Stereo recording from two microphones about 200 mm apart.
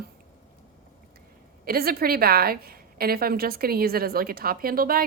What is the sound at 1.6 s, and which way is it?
A woman's voice, 50° right (ahead or behind).